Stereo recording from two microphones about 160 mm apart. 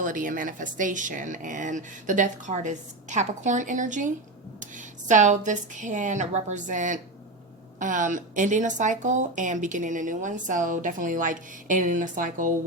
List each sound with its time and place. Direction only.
0.0 s speech: 55° right (ahead or behind)